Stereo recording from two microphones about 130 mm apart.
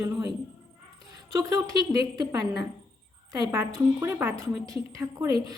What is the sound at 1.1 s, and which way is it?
A woman's voice, 25° right (ahead or behind).